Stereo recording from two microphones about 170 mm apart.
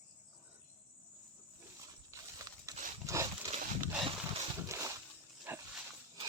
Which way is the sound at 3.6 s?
50° right (ahead or behind).